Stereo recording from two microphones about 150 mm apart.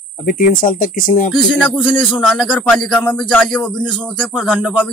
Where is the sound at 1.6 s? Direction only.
5° left (ahead or behind).